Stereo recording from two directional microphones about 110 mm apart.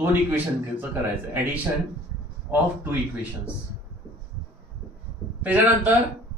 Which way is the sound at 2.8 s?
20° right (ahead or behind).